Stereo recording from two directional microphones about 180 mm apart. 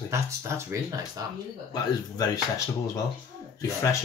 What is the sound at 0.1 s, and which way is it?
Speech, 15° right (ahead or behind).